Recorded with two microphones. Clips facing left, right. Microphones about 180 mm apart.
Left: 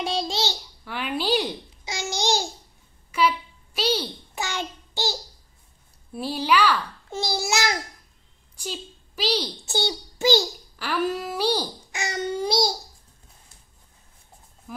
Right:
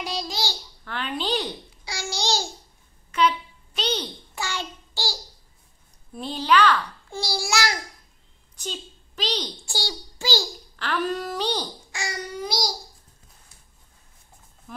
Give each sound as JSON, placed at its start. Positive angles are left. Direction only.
{"t": 0.0, "sound": "babbling", "side_deg": 25}
{"t": 0.8, "sound": "a child's voice", "side_deg": 10}
{"t": 3.1, "sound": "a sound", "side_deg": 5}
{"t": 4.4, "sound": "child singing", "side_deg": 20}
{"t": 6.1, "sound": "a sound", "side_deg": 10}
{"t": 7.1, "sound": "babbling", "side_deg": 20}
{"t": 8.5, "sound": "a woman's voice", "side_deg": 10}
{"t": 9.7, "sound": "a child's voice", "side_deg": 20}
{"t": 10.8, "sound": "a sound", "side_deg": 10}
{"t": 11.9, "sound": "babbling", "side_deg": 20}